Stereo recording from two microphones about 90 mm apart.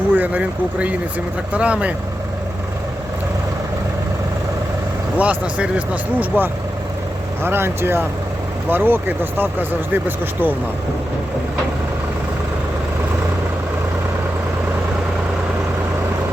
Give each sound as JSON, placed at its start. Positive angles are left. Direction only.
{"t": 0.1, "sound": "speech", "side_deg": -15}
{"t": 5.1, "sound": "speech", "side_deg": -15}